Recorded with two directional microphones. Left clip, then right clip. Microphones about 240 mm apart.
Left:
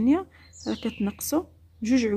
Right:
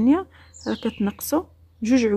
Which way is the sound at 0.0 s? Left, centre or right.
Centre.